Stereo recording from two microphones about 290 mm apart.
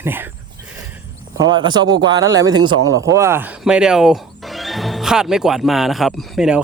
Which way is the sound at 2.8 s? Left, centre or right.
Right.